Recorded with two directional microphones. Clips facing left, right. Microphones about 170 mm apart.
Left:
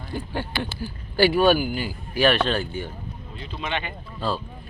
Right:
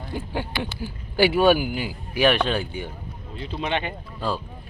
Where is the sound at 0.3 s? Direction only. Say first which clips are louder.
Even; 15° right (ahead or behind).